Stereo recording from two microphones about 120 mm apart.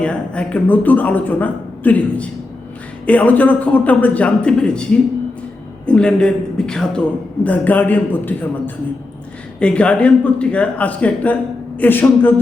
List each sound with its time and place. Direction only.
0.0 s a man's voice: 10° left (ahead or behind)